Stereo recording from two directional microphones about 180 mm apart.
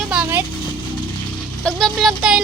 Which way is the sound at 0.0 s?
5° right (ahead or behind).